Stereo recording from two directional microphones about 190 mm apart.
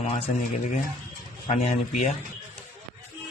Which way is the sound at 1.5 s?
40° left (ahead or behind).